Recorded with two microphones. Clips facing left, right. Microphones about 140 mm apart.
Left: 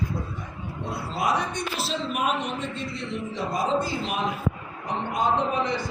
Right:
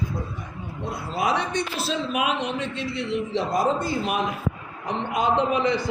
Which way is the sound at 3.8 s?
55° right (ahead or behind).